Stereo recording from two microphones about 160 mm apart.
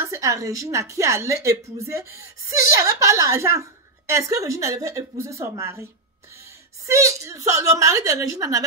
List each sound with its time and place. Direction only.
0.0 s a woman's voice: 20° right (ahead or behind)
6.9 s a woman's voice: 20° right (ahead or behind)